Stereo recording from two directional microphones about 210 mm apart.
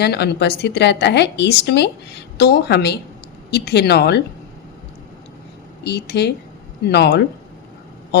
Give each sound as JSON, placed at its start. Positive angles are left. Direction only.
{"t": 0.0, "sound": "a woman's voice", "side_deg": 50}
{"t": 5.8, "sound": "a woman's voice", "side_deg": 55}